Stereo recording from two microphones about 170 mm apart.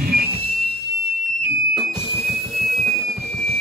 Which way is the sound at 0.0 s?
60° right (ahead or behind).